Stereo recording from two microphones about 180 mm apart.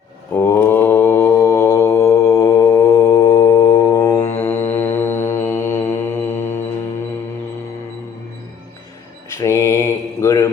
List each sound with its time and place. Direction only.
0.3 s mantra: 15° left (ahead or behind)
9.3 s mantra: 15° left (ahead or behind)